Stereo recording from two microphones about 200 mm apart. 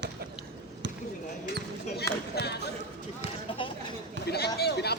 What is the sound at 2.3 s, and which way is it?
Speech, 55° left (ahead or behind).